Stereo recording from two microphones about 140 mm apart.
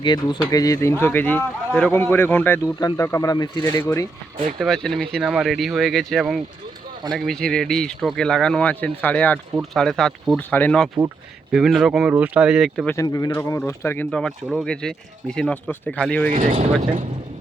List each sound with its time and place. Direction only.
0.0 s speech: 30° left (ahead or behind)
3.6 s speech: 15° left (ahead or behind)
4.6 s speech: 5° left (ahead or behind)
11.5 s speech: 5° right (ahead or behind)
13.0 s speech: 25° left (ahead or behind); by 16.3 s 10° left (ahead or behind)